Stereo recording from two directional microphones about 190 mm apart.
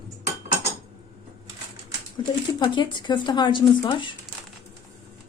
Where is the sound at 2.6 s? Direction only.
25° left (ahead or behind).